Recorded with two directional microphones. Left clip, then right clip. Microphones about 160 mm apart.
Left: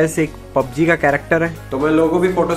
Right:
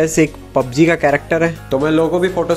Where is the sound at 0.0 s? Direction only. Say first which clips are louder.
Right 3 dB; 25° right (ahead or behind).